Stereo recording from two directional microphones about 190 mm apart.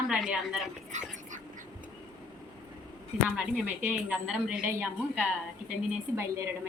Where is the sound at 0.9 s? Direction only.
40° right (ahead or behind).